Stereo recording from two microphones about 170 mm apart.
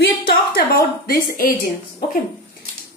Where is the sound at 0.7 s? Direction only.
55° left (ahead or behind).